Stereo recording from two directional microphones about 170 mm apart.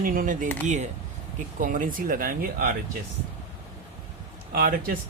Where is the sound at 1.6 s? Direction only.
50° right (ahead or behind).